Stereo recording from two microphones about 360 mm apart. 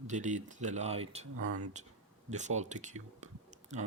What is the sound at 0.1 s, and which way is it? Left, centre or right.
Speech, centre.